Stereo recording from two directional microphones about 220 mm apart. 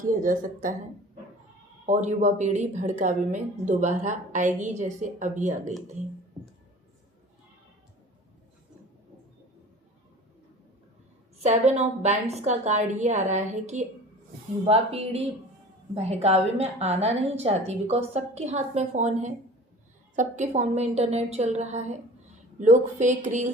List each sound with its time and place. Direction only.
0.0 s a woman's voice: 40° right (ahead or behind)
1.9 s a woman's voice: 30° right (ahead or behind)
11.3 s a woman's voice: 30° right (ahead or behind)